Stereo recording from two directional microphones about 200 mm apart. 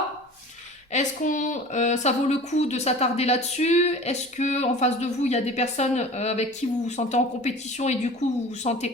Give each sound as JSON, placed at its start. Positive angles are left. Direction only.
{"t": 0.9, "sound": "speech", "side_deg": 40}